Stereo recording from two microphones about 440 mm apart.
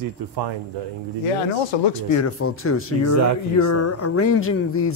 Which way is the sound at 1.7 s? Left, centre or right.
Left.